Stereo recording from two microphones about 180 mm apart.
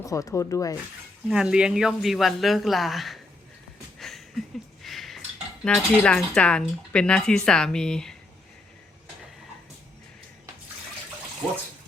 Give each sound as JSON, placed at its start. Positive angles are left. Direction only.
{"t": 0.0, "sound": "speech", "side_deg": 20}
{"t": 1.3, "sound": "speech", "side_deg": -5}
{"t": 4.8, "sound": "a sound", "side_deg": 0}
{"t": 5.6, "sound": "speech", "side_deg": 5}